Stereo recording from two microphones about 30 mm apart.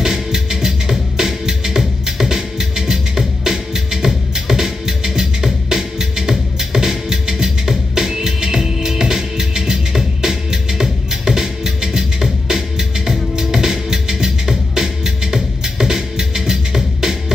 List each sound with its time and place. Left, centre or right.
0.0 s music: centre